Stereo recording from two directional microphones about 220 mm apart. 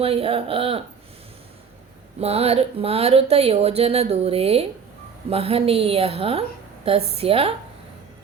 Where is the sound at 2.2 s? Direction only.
30° right (ahead or behind).